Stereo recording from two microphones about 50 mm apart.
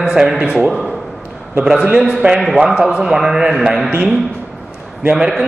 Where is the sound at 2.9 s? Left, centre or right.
Centre.